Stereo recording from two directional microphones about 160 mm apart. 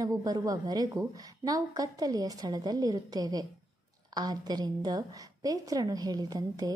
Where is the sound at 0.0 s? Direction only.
20° right (ahead or behind).